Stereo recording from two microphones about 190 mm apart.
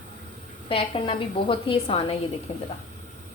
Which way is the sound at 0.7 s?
30° left (ahead or behind).